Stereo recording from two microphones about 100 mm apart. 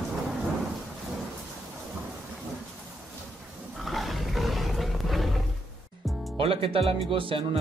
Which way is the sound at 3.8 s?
Centre (ahead or behind).